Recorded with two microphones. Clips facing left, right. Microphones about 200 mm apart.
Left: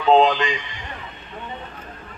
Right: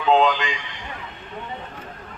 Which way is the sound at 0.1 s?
35° left (ahead or behind).